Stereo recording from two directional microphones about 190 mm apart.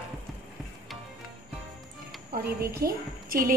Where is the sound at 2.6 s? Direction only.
50° right (ahead or behind).